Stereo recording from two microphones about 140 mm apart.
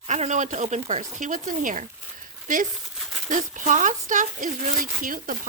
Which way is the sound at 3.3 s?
65° right (ahead or behind).